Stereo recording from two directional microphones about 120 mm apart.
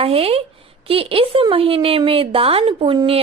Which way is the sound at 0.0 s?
55° right (ahead or behind).